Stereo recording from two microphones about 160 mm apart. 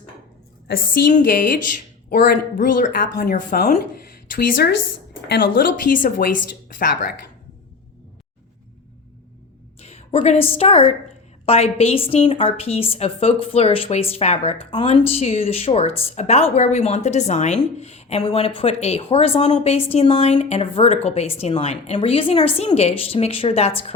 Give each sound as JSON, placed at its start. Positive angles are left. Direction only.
{"t": 1.0, "sound": "a woman's voice", "side_deg": 60}
{"t": 2.0, "sound": "a woman's voice", "side_deg": 70}
{"t": 3.2, "sound": "a woman's voice", "side_deg": 70}
{"t": 9.8, "sound": "a woman's voice", "side_deg": 40}